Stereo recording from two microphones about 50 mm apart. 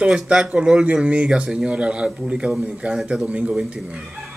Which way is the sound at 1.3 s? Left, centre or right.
Centre.